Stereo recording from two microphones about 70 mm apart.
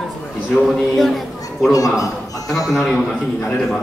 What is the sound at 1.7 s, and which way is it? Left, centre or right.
Speech, left.